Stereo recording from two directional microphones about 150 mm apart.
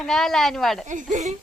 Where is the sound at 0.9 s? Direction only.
60° right (ahead or behind).